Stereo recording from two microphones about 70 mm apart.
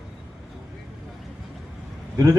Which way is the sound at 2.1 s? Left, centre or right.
Right.